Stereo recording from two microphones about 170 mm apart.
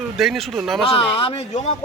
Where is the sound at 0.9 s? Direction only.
35° left (ahead or behind).